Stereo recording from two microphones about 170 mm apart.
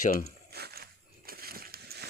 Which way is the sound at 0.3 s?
70° right (ahead or behind).